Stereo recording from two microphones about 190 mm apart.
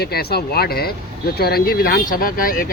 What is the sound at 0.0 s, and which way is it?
Speech, 55° left (ahead or behind).